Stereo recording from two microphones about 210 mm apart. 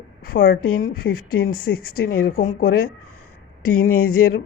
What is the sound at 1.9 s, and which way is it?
Speech, 90° left.